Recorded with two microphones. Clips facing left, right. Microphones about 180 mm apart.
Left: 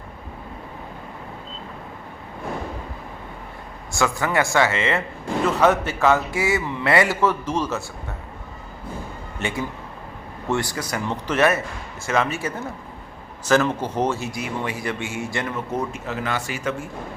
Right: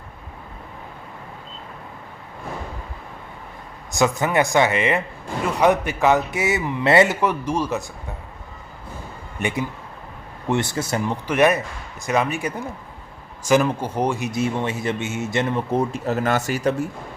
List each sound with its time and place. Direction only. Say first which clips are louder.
3.9 s a man's voice: right 3 dB; 20° right (ahead or behind)
9.4 s a man's voice: right 2 dB; 20° right (ahead or behind)
11.1 s a man's voice: right 1 dB; 15° right (ahead or behind); by 16.7 s 40° right (ahead or behind)